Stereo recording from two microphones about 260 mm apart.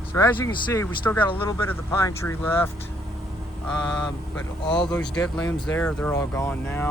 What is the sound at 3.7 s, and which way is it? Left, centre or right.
Speech, centre.